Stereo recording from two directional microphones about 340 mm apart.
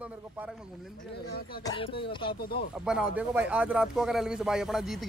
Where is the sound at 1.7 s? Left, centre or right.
Centre.